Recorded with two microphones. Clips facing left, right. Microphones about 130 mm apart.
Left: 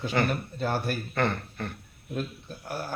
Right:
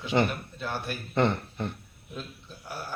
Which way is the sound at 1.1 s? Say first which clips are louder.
Right 5 dB; 20° right (ahead or behind).